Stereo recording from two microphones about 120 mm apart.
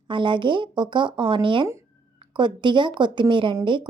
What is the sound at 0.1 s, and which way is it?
Speech, 45° right (ahead or behind).